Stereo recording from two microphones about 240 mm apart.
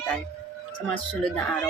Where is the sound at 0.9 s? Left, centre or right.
Centre.